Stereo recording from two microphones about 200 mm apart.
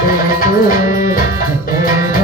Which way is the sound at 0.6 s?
45° left (ahead or behind).